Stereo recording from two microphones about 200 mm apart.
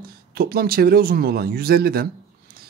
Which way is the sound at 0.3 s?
50° right (ahead or behind).